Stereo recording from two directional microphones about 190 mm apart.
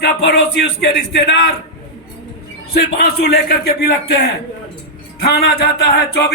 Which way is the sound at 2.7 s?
55° left (ahead or behind).